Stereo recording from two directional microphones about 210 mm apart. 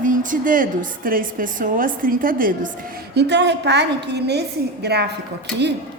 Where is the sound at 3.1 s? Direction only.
55° right (ahead or behind).